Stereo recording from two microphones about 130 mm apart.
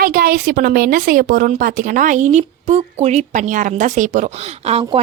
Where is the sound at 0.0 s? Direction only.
90° right.